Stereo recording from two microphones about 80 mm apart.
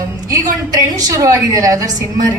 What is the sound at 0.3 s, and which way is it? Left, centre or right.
A woman's voice, right.